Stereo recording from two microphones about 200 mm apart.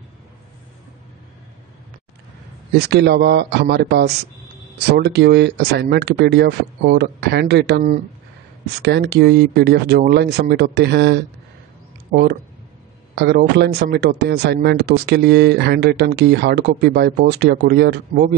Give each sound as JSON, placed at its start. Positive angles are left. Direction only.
{"t": 2.8, "sound": "speech", "side_deg": -55}